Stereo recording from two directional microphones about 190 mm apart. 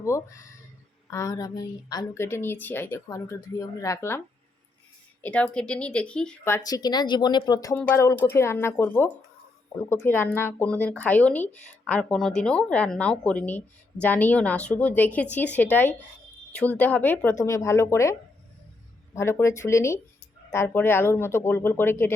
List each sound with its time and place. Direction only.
0.0 s speech: 15° left (ahead or behind)
5.2 s speech: 5° left (ahead or behind)
6.7 s speech: 20° left (ahead or behind)